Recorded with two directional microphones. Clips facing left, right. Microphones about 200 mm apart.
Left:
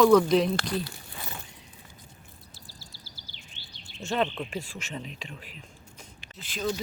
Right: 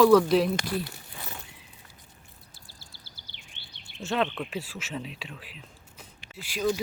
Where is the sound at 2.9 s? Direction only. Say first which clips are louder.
Left 2 dB; 55° right (ahead or behind).